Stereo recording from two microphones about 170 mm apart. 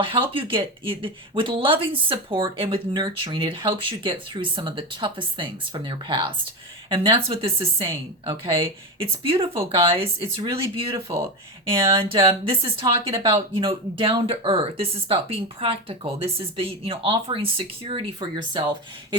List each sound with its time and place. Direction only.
0.0 s speech: 30° right (ahead or behind)
13.7 s speech: 30° right (ahead or behind)